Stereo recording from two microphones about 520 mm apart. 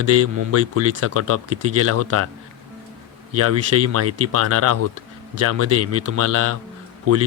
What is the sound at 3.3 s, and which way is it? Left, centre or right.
Speech, right.